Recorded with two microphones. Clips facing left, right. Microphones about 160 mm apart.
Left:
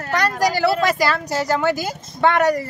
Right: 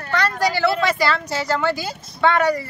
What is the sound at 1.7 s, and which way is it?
Speech, 45° left (ahead or behind).